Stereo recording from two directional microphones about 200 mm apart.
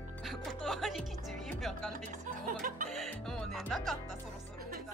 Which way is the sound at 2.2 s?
40° right (ahead or behind).